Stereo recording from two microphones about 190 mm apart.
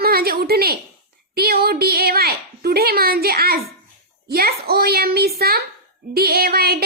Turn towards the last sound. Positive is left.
turn(degrees=-55)  # may be behind; listen again after turning